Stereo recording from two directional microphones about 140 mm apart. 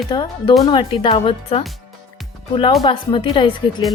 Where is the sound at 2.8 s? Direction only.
35° left (ahead or behind).